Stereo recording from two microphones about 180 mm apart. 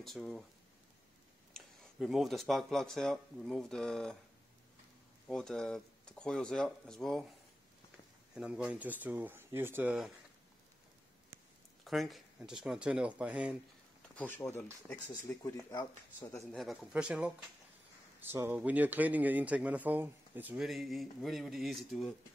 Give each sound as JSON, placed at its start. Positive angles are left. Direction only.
{"t": 0.0, "sound": "speech", "side_deg": 0}
{"t": 1.5, "sound": "speech", "side_deg": 0}
{"t": 5.3, "sound": "speech", "side_deg": 5}
{"t": 8.4, "sound": "speech", "side_deg": -5}
{"t": 11.8, "sound": "speech", "side_deg": 0}
{"t": 14.1, "sound": "speech", "side_deg": 10}
{"t": 16.5, "sound": "speech", "side_deg": 0}